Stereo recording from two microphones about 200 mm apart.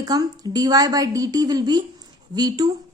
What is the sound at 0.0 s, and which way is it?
A woman's voice, 20° right (ahead or behind).